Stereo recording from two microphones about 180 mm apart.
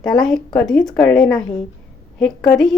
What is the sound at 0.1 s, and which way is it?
A woman's voice, centre (ahead or behind).